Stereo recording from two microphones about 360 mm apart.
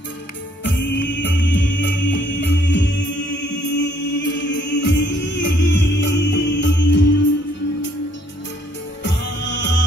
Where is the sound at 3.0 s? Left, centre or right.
Left.